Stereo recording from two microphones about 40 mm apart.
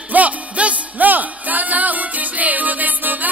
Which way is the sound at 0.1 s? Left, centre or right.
Right.